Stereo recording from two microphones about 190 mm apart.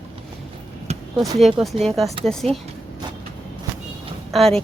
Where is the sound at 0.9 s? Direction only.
35° right (ahead or behind).